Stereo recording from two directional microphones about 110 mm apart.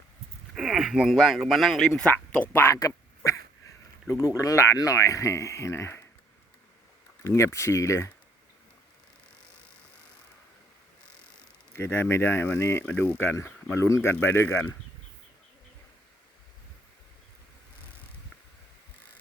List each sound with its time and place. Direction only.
0.5 s speech: 5° right (ahead or behind); by 2.7 s 20° left (ahead or behind)
2.7 s quack: 30° left (ahead or behind)
4.1 s speech: 30° left (ahead or behind)
7.3 s speech: 30° left (ahead or behind)
11.7 s speech: 25° left (ahead or behind)